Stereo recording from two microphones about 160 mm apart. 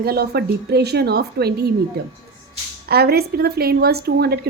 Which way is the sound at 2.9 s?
75° right (ahead or behind).